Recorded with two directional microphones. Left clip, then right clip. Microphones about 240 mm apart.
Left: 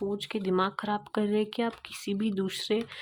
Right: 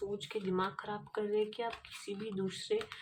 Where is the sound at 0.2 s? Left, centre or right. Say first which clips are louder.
Left 8 dB; left.